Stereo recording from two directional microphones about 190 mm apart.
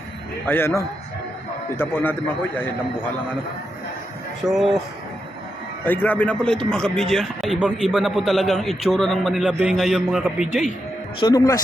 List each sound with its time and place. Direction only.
0.4 s a man's voice: 10° left (ahead or behind)
4.4 s speech: centre (ahead or behind)
5.8 s a man's voice: 10° left (ahead or behind)
11.2 s speech: 20° left (ahead or behind)